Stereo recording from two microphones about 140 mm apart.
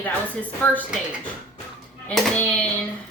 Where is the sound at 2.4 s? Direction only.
10° left (ahead or behind).